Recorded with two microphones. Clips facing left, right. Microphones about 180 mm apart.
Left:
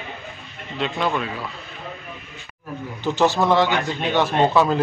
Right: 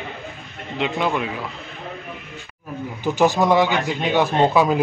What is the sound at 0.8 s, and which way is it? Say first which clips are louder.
Speech: right 1 dB; 15° right (ahead or behind).